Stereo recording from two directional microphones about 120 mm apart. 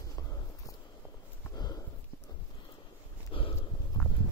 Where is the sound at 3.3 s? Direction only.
45° left (ahead or behind).